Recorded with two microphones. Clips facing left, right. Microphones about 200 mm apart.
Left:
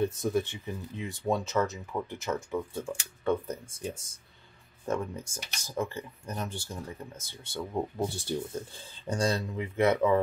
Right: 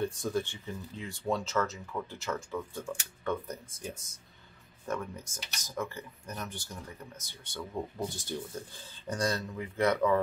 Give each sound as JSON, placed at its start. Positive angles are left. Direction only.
{"t": 0.0, "sound": "speech", "side_deg": 20}